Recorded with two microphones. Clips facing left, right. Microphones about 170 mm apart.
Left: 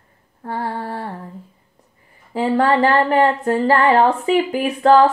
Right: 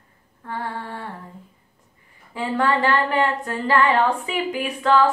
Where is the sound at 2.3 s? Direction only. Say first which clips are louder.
Left 5 dB; 35° left (ahead or behind).